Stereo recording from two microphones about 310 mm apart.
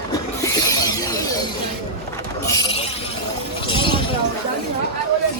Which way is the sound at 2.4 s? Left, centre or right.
Centre.